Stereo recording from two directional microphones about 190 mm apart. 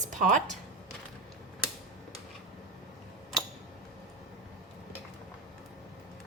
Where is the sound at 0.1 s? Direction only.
40° right (ahead or behind).